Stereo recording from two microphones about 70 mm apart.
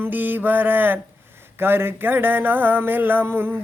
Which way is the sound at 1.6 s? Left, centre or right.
Right.